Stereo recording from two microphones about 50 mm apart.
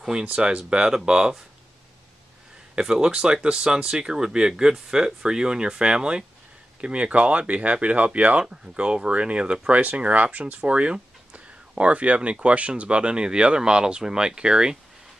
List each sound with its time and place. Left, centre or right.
0.2 s speech: right
2.7 s speech: centre